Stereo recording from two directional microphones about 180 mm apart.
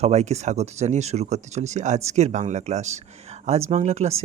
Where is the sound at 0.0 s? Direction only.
40° right (ahead or behind).